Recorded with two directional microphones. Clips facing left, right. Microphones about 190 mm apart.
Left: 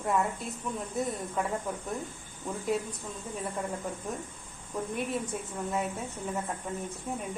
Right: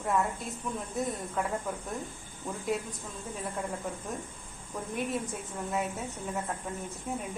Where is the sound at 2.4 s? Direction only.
Centre (ahead or behind).